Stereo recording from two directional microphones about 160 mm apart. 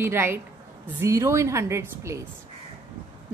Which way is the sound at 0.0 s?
15° right (ahead or behind).